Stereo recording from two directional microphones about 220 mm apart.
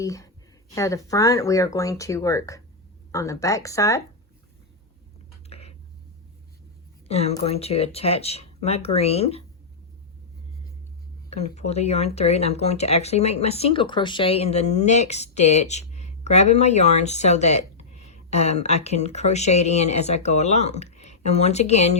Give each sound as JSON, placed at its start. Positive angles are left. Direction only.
{"t": 0.0, "sound": "speech", "side_deg": 15}
{"t": 5.5, "sound": "a sound", "side_deg": 30}
{"t": 7.1, "sound": "speech", "side_deg": 30}
{"t": 11.3, "sound": "speech", "side_deg": 30}